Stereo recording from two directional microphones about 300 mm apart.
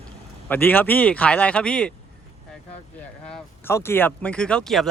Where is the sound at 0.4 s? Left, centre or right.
Centre.